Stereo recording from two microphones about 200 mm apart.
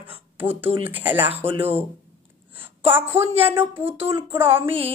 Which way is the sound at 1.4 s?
30° right (ahead or behind).